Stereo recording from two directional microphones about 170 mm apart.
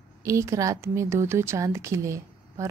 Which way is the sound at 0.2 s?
15° right (ahead or behind).